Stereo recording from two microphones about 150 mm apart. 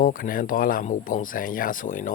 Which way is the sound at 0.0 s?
70° left (ahead or behind).